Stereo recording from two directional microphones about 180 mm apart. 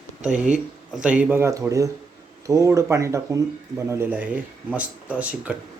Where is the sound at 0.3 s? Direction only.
5° right (ahead or behind).